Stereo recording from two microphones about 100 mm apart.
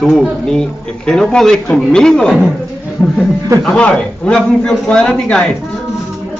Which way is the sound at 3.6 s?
5° left (ahead or behind).